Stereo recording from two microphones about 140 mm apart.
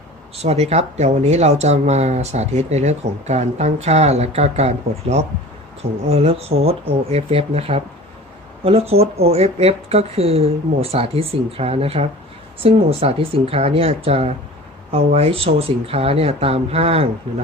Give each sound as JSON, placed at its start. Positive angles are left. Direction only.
{"t": 0.4, "sound": "speech", "side_deg": -50}